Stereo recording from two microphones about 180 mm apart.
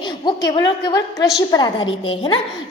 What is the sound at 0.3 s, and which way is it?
A woman's voice, 25° left (ahead or behind).